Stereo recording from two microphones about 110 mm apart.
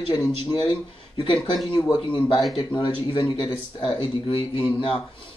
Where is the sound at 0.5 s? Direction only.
45° left (ahead or behind).